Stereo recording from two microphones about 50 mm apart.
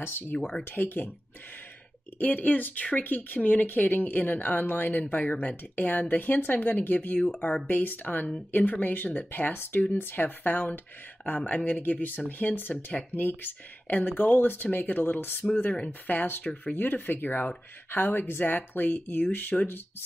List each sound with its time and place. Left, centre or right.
0.4 s speech: centre
0.7 s speech: left
2.1 s speech: left
7.2 s speech: left